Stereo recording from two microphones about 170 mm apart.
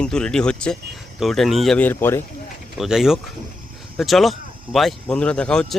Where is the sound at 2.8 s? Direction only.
Centre (ahead or behind).